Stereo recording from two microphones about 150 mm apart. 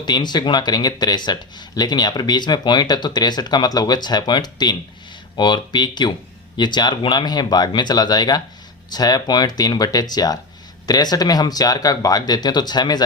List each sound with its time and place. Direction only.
0.0 s speech: 30° left (ahead or behind)